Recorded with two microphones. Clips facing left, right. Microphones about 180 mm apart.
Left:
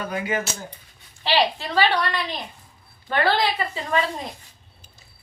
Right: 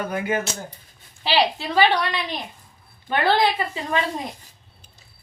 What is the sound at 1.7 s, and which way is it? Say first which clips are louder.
Speech: right 3 dB; 15° right (ahead or behind).